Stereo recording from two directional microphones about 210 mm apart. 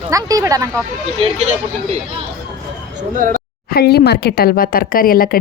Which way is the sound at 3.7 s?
50° left (ahead or behind).